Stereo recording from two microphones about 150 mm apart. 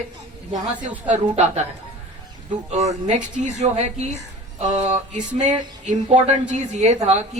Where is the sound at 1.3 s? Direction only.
50° right (ahead or behind).